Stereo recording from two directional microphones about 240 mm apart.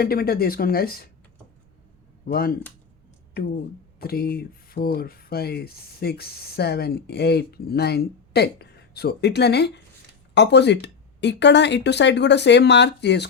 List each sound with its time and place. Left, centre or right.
0.0 s speech: left
2.2 s speech: left